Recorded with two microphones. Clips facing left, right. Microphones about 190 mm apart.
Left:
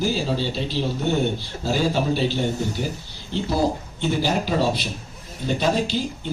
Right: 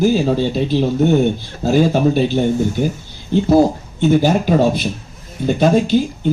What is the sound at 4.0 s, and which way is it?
A man's voice, 50° right (ahead or behind).